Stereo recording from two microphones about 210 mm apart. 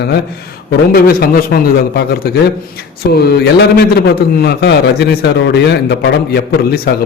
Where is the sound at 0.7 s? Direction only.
45° left (ahead or behind).